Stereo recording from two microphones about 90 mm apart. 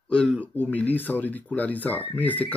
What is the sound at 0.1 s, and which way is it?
Speech, 10° left (ahead or behind).